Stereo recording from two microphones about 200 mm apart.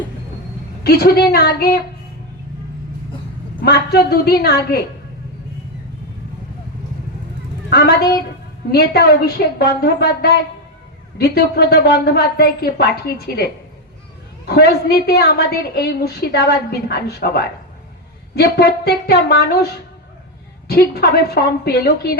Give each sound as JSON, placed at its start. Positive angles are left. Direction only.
{"t": 0.9, "sound": "a woman's voice", "side_deg": 55}
{"t": 3.6, "sound": "a woman's voice", "side_deg": 50}
{"t": 7.7, "sound": "a woman's voice", "side_deg": 55}
{"t": 14.4, "sound": "a woman's voice", "side_deg": 55}
{"t": 20.7, "sound": "a woman's voice", "side_deg": 50}